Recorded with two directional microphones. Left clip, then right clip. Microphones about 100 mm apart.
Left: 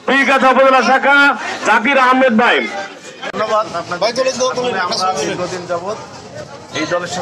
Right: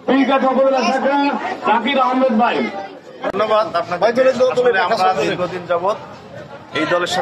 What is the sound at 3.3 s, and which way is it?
A man's voice, 30° right (ahead or behind).